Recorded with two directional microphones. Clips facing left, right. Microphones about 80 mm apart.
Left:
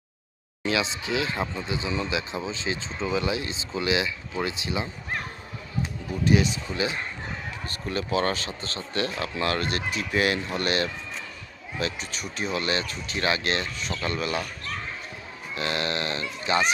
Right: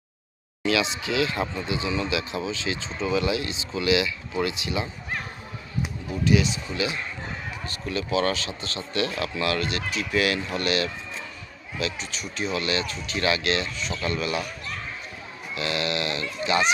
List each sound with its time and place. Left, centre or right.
0.6 s speech: left
6.2 s speech: left
11.8 s speech: left
15.5 s speech: left